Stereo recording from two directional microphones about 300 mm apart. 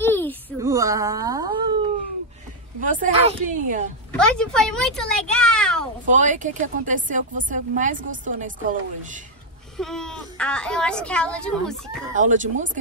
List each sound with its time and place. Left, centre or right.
0.0 s a sound: centre
0.6 s a sound: centre
2.8 s speech: right
4.1 s speech: centre
6.0 s speech: right
9.8 s speech: centre
12.2 s speech: right